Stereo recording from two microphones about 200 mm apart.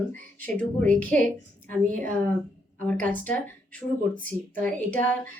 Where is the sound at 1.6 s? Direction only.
40° right (ahead or behind).